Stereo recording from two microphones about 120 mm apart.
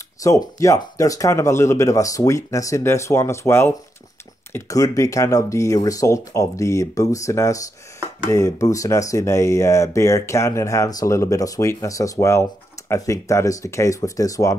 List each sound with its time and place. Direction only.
0.2 s speech: 25° left (ahead or behind)